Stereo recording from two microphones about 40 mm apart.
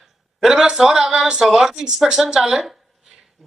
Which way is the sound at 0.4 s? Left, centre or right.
Centre.